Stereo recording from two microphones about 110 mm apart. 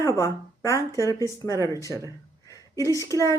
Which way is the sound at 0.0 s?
25° left (ahead or behind).